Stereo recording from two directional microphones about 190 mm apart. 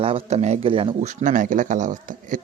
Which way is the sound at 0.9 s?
40° right (ahead or behind).